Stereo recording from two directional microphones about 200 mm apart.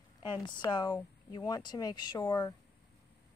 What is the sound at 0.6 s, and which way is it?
Speech, 20° left (ahead or behind).